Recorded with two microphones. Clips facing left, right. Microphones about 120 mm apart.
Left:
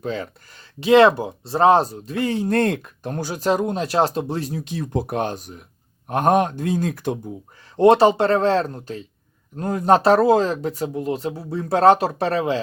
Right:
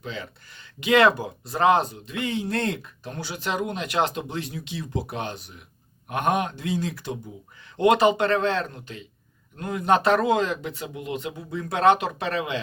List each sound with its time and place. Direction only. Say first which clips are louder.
0.0 s speech: left 8 dB; 45° left (ahead or behind)
7.8 s speech: left 5 dB; 35° left (ahead or behind)